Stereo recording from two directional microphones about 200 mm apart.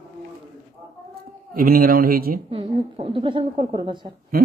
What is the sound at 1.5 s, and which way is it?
Speech, 45° right (ahead or behind).